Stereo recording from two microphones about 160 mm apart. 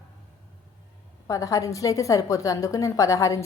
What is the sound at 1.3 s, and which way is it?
A woman's voice, 20° left (ahead or behind).